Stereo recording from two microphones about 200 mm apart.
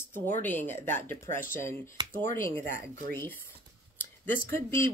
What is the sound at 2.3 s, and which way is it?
Speech, 15° left (ahead or behind).